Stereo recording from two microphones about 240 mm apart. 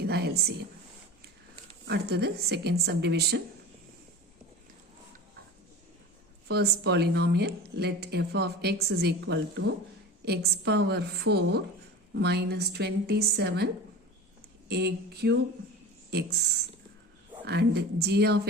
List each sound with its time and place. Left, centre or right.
0.0 s a sound: right
1.9 s a woman's voice: right
6.5 s a woman's voice: right
14.7 s a woman's voice: right
17.4 s a woman's voice: right